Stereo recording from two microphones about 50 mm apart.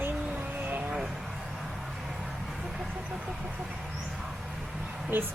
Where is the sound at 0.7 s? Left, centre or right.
Right.